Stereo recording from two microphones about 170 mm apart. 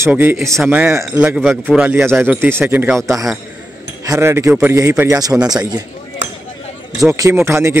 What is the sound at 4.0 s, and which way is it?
A man's voice, 15° right (ahead or behind).